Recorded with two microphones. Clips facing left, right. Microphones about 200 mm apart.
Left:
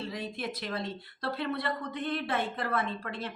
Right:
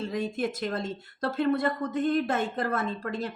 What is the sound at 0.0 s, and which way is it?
Speech, 45° right (ahead or behind).